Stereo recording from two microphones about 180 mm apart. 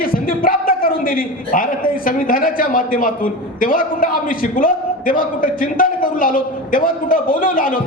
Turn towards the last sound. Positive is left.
turn(degrees=50)  # may be behind; listen again after turning